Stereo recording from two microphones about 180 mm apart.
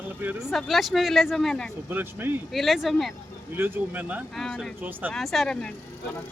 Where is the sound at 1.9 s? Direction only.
10° right (ahead or behind).